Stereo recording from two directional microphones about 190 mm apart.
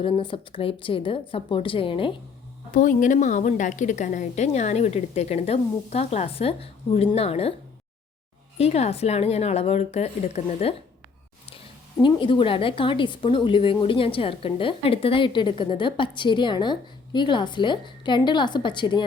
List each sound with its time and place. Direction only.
0.0 s a woman's voice: 25° left (ahead or behind)
2.7 s a woman's voice: 45° left (ahead or behind)
8.5 s a woman's voice: 35° left (ahead or behind)
11.9 s a woman's voice: 25° left (ahead or behind)